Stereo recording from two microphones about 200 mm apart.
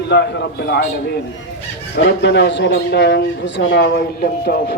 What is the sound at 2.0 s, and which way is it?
Speech, 60° left (ahead or behind).